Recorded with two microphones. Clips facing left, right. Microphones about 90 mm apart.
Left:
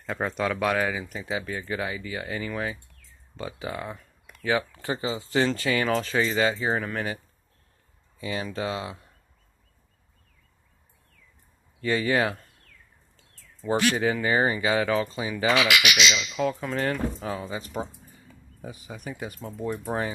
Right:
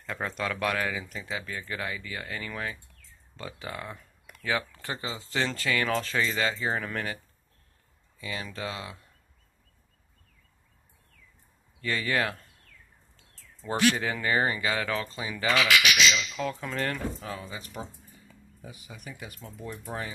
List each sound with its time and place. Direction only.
0.0 s speech: 10° left (ahead or behind)
8.2 s speech: 25° left (ahead or behind)
11.8 s speech: 20° left (ahead or behind)
13.6 s speech: 10° left (ahead or behind)
15.8 s speech: 80° left
16.3 s speech: 10° left (ahead or behind)
17.2 s speech: 25° left (ahead or behind)